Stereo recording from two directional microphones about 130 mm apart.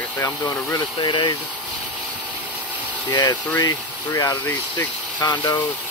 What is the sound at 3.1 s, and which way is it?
Speech, 35° left (ahead or behind).